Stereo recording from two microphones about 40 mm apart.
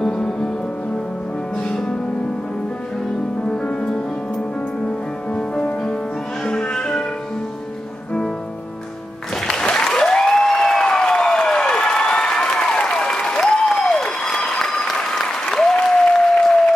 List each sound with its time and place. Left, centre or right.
0.0 s music: centre
3.4 s music: left
9.5 s applause: centre